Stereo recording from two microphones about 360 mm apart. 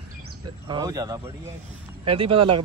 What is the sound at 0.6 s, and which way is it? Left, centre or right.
Speech, centre.